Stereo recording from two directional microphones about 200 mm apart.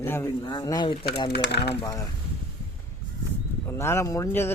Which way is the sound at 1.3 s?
55° left (ahead or behind).